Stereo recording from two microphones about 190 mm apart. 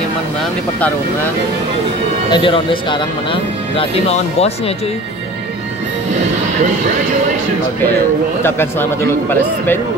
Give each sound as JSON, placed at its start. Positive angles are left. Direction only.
{"t": 2.3, "sound": "speech", "side_deg": 25}
{"t": 8.4, "sound": "speech", "side_deg": 10}